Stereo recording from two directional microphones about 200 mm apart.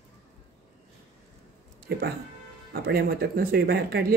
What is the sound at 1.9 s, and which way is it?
Speech, 55° right (ahead or behind).